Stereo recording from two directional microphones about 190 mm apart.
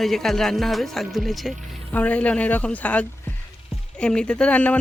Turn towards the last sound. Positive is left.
turn(degrees=5)  # may be behind; listen again after turning